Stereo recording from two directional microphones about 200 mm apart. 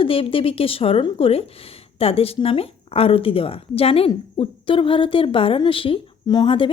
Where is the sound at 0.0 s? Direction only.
25° left (ahead or behind).